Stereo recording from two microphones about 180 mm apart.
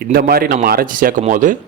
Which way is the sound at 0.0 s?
55° right (ahead or behind).